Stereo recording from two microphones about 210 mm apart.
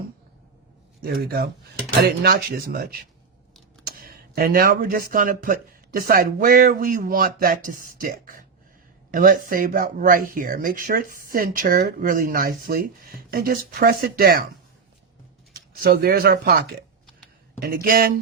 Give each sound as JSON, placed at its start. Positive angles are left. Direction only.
{"t": 1.0, "sound": "speech", "side_deg": -45}
{"t": 15.7, "sound": "speech", "side_deg": -45}